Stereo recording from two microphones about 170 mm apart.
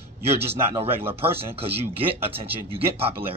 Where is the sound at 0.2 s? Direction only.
35° right (ahead or behind).